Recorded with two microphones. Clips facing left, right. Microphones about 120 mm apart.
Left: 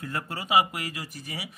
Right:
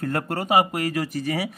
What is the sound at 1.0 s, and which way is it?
Speech, 70° right (ahead or behind).